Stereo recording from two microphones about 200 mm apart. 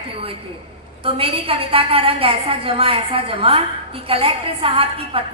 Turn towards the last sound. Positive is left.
turn(degrees=-25)  # may be behind; listen again after turning